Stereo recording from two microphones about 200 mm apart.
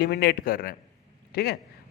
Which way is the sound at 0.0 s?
50° left (ahead or behind).